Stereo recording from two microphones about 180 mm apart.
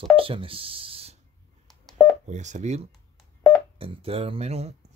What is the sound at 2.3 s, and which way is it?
Speech, 40° right (ahead or behind).